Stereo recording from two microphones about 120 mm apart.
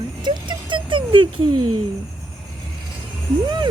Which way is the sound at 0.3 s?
40° right (ahead or behind).